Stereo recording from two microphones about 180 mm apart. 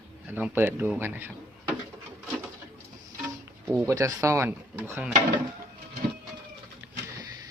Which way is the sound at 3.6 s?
15° right (ahead or behind).